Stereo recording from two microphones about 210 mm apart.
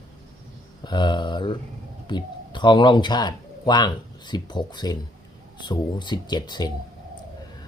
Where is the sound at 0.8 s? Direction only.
20° left (ahead or behind).